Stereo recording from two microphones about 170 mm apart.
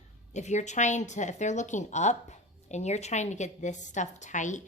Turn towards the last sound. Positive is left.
turn(degrees=45)  # may be behind; listen again after turning